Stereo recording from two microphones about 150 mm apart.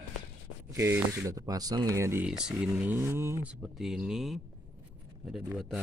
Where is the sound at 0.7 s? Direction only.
20° right (ahead or behind).